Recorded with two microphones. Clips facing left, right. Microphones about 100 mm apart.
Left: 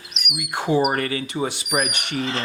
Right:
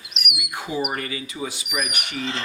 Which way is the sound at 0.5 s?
75° left (ahead or behind).